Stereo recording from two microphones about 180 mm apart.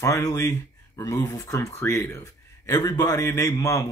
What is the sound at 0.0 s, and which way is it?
Speech, 15° left (ahead or behind).